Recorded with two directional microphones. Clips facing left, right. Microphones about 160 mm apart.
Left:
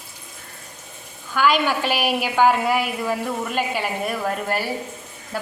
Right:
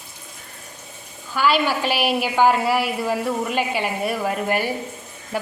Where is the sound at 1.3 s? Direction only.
5° right (ahead or behind).